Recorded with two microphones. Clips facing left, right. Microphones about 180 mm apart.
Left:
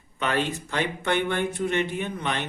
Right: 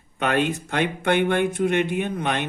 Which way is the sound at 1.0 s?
50° right (ahead or behind).